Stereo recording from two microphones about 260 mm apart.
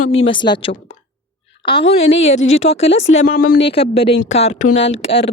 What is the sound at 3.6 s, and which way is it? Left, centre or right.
A woman's voice, left.